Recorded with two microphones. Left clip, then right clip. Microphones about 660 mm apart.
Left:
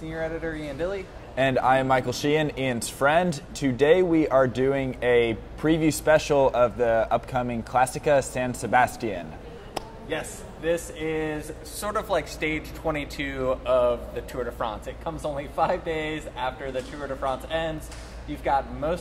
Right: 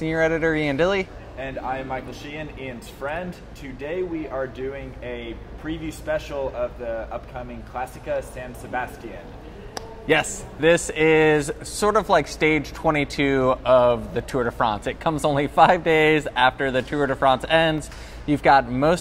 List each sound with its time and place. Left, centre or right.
0.0 s speech: right
1.3 s speech: left
10.0 s speech: right